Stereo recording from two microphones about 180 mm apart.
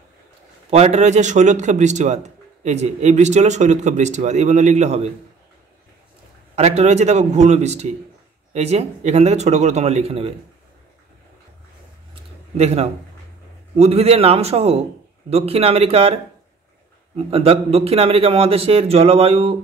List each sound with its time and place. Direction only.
0.7 s a man's voice: 35° right (ahead or behind)
6.5 s a man's voice: 35° right (ahead or behind)
12.5 s a man's voice: 35° right (ahead or behind)